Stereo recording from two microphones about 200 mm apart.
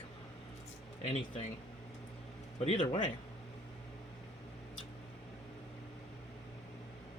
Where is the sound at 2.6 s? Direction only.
25° left (ahead or behind).